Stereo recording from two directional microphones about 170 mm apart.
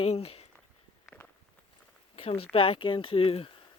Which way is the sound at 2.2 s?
35° left (ahead or behind).